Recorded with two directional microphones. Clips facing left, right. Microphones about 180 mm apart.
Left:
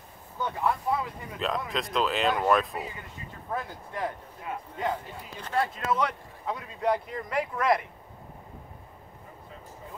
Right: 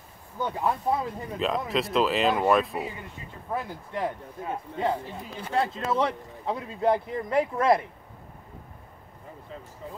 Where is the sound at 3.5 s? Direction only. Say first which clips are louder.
Right 3 dB; 25° right (ahead or behind).